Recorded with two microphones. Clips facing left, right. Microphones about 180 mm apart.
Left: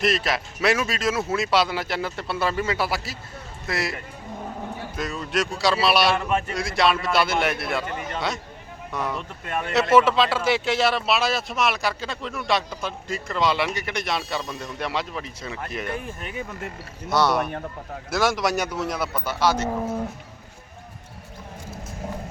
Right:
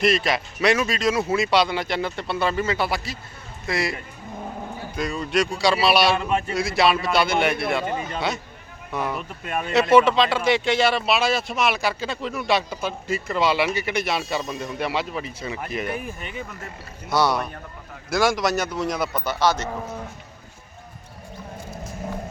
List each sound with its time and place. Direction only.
0.0 s speech: centre (ahead or behind)
4.9 s speech: centre (ahead or behind)
6.1 s speech: 20° right (ahead or behind)
6.6 s speech: 5° right (ahead or behind)
7.9 s speech: 20° right (ahead or behind)
8.9 s speech: centre (ahead or behind)
9.1 s speech: 20° right (ahead or behind)
9.9 s a man's voice: 5° left (ahead or behind)